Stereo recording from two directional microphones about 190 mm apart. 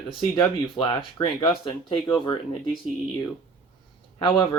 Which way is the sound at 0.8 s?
25° left (ahead or behind).